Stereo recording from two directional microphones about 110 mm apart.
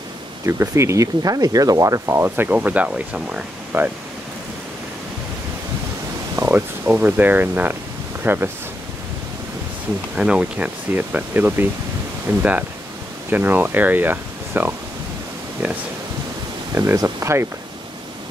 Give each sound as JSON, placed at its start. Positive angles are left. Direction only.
{"t": 0.5, "sound": "speech", "side_deg": -25}
{"t": 6.3, "sound": "a sound", "side_deg": -25}
{"t": 6.9, "sound": "speech", "side_deg": -15}
{"t": 10.1, "sound": "speech", "side_deg": -10}
{"t": 16.7, "sound": "speech", "side_deg": -25}